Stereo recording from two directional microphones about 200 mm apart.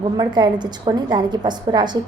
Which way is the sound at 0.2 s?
20° right (ahead or behind).